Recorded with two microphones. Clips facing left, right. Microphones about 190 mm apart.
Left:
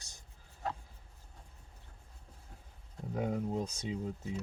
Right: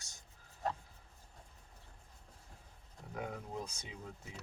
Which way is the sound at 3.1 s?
30° left (ahead or behind).